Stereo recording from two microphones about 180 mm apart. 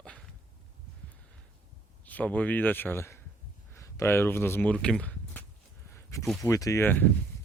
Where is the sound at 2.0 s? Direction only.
10° left (ahead or behind).